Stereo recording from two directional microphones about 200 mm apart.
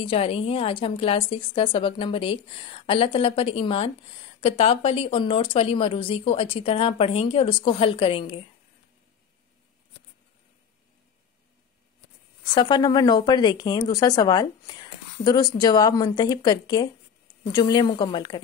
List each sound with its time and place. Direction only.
0.0 s speech: 30° left (ahead or behind)
12.5 s speech: 20° left (ahead or behind)